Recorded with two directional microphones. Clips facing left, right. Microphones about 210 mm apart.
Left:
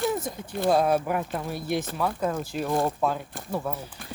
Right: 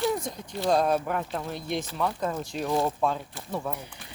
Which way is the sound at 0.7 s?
5° left (ahead or behind).